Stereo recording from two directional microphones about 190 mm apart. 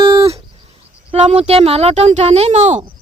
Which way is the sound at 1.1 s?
30° right (ahead or behind).